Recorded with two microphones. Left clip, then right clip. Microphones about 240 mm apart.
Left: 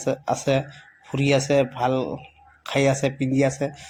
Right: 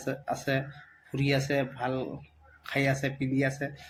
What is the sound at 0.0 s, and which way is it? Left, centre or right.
Speech, left.